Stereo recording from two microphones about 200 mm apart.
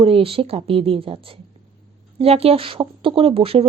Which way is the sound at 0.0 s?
30° right (ahead or behind).